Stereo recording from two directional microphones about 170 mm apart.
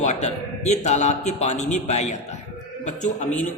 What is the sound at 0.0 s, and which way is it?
A man's voice, 40° left (ahead or behind).